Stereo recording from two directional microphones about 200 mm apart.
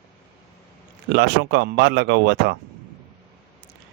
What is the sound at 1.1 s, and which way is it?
Speech, 55° right (ahead or behind).